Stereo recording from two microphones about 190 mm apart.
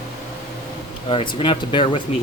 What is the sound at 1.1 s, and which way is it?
Speech, 30° left (ahead or behind).